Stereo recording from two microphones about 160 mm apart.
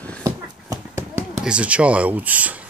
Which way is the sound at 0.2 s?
20° right (ahead or behind).